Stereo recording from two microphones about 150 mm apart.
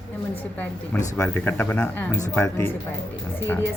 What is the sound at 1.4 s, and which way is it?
A man's voice, 10° left (ahead or behind).